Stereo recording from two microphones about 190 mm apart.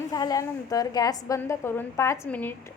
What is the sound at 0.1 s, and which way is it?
A woman's voice, 20° left (ahead or behind).